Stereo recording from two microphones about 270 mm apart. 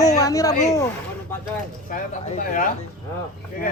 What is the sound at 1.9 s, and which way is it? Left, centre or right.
Speech, left.